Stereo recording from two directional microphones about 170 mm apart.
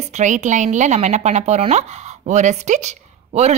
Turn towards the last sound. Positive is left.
turn(degrees=-40)  # may be behind; listen again after turning